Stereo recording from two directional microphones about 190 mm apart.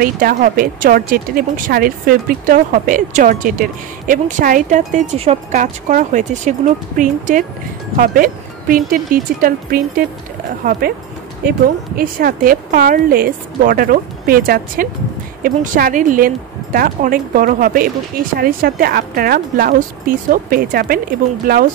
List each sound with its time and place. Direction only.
0.0 s a woman's voice: 50° right (ahead or behind)
5.5 s a woman's voice: 45° right (ahead or behind)
12.0 s a woman's voice: 50° right (ahead or behind)